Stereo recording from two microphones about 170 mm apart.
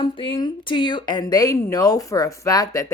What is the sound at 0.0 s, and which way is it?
A woman's voice, 30° left (ahead or behind).